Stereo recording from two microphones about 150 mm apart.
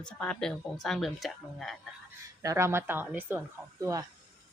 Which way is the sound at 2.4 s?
20° right (ahead or behind).